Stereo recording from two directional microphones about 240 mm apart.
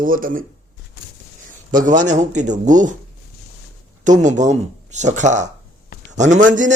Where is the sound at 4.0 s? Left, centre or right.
Right.